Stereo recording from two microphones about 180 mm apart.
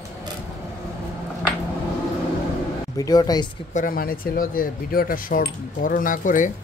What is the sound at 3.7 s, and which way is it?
Speech, 50° left (ahead or behind).